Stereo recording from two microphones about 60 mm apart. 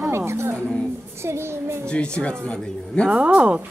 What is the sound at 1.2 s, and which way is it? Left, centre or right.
Child singing, right.